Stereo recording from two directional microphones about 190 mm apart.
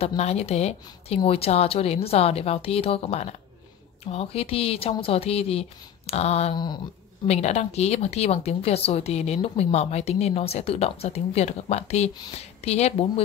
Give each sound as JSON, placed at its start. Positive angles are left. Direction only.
{"t": 0.0, "sound": "speech", "side_deg": 35}
{"t": 7.2, "sound": "speech", "side_deg": 35}